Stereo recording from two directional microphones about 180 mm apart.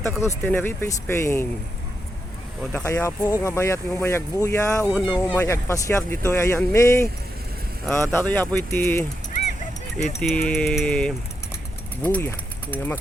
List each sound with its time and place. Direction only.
0.2 s speech: 15° left (ahead or behind)
2.8 s speech: 20° left (ahead or behind)
4.8 s speech: 5° left (ahead or behind)
10.2 s speech: 5° left (ahead or behind)